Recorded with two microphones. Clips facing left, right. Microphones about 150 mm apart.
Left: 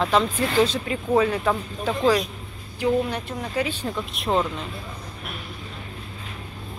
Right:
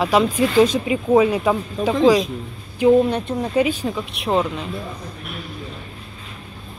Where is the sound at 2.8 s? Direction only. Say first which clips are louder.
Right 8 dB; 25° right (ahead or behind).